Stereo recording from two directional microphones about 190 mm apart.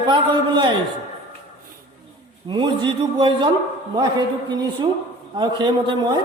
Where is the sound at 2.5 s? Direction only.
25° right (ahead or behind).